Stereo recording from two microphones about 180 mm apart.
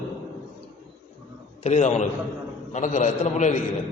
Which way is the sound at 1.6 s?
40° left (ahead or behind).